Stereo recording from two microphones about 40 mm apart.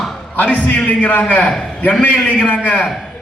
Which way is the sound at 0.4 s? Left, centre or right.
Left.